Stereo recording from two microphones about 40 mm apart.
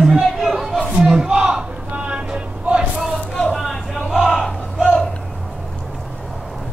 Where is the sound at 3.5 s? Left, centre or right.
Centre.